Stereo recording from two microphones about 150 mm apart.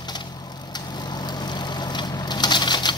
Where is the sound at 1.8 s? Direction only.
30° left (ahead or behind).